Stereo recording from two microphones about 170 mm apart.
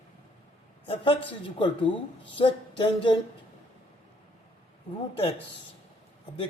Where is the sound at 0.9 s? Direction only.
30° left (ahead or behind).